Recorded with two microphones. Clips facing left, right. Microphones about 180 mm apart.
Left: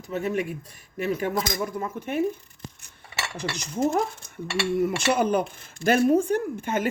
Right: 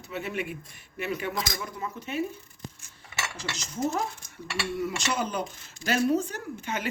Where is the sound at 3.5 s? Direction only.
55° left (ahead or behind).